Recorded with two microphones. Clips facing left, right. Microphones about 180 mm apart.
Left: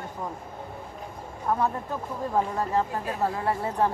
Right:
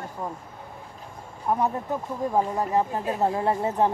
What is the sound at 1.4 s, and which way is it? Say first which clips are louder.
Speech: right 2 dB; 15° right (ahead or behind).